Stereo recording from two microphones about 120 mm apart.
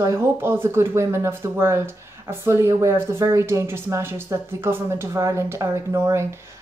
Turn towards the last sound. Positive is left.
turn(degrees=-25)  # may be behind; listen again after turning